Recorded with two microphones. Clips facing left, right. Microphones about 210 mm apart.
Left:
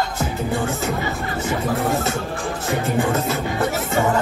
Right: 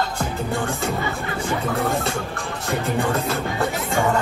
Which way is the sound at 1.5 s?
5° left (ahead or behind).